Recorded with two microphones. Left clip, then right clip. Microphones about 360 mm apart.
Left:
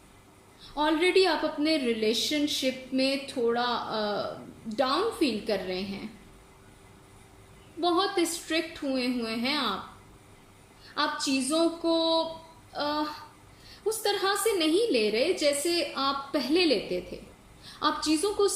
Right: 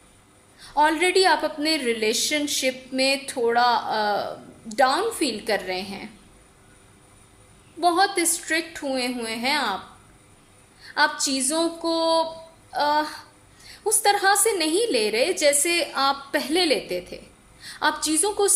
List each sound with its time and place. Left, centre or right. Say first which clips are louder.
0.8 s a woman's voice: right 5 dB; right
7.8 s a woman's voice: right 6 dB; centre
10.8 s a woman's voice: right 7 dB; right